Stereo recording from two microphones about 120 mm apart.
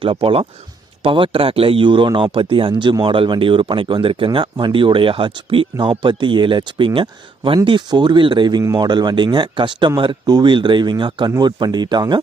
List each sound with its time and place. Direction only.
0.0 s speech: 45° right (ahead or behind)